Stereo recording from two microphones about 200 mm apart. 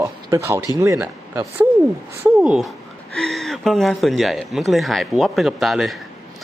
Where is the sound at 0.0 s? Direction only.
15° right (ahead or behind).